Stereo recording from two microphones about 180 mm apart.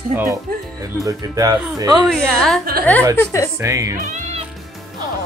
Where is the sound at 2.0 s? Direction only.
Centre (ahead or behind).